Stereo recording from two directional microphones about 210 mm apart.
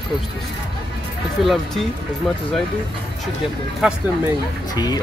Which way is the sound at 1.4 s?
Centre (ahead or behind).